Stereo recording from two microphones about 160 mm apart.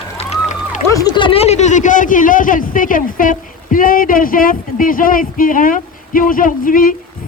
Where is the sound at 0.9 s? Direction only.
25° left (ahead or behind).